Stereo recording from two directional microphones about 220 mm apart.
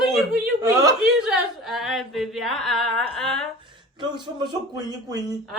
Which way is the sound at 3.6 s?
20° right (ahead or behind).